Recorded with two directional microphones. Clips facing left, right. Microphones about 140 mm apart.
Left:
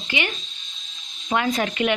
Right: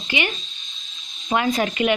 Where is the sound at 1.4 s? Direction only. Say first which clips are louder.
Right 3 dB; 20° right (ahead or behind).